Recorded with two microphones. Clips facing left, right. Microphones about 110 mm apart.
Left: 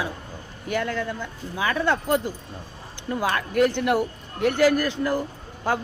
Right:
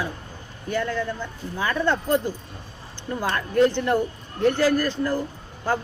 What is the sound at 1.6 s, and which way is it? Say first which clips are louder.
Speech: even; 10° left (ahead or behind).